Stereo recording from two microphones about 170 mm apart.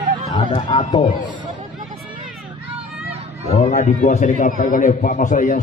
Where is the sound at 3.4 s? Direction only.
40° left (ahead or behind).